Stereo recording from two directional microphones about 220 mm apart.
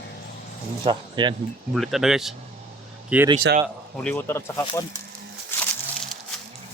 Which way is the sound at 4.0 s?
10° left (ahead or behind).